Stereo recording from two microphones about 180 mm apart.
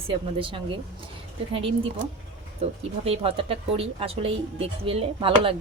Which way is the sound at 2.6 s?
35° right (ahead or behind).